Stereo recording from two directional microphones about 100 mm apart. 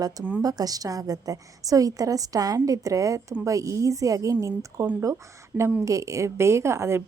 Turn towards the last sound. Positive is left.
turn(degrees=-25)  # may be behind; listen again after turning